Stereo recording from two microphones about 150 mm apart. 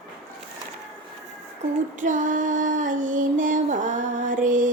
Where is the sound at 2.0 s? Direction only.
60° right (ahead or behind).